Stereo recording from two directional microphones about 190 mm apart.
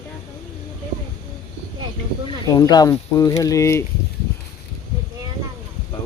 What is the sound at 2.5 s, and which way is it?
Speech, 20° left (ahead or behind).